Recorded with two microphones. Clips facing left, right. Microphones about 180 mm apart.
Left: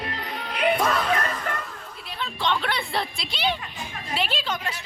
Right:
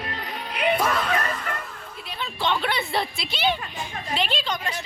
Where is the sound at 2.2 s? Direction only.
5° right (ahead or behind).